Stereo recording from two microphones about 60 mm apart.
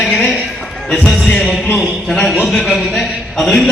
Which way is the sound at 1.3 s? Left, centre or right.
Centre.